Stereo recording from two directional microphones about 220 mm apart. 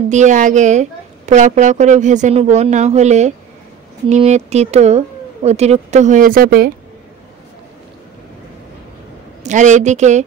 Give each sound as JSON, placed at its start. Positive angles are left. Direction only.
{"t": 0.1, "sound": "a woman's voice", "side_deg": -35}
{"t": 9.4, "sound": "a woman's voice", "side_deg": -35}